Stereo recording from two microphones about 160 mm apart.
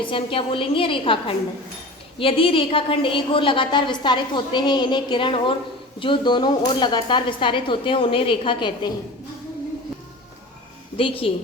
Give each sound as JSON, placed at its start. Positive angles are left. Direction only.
{"t": 0.0, "sound": "a woman's voice", "side_deg": 35}
{"t": 10.9, "sound": "a woman's voice", "side_deg": 35}